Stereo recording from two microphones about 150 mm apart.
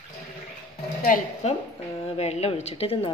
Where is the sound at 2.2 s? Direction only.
45° left (ahead or behind).